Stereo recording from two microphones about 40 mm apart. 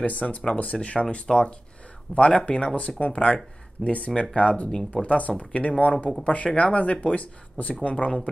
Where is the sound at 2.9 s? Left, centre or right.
Left.